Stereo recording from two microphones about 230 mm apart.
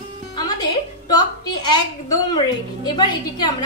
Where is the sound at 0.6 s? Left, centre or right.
Centre.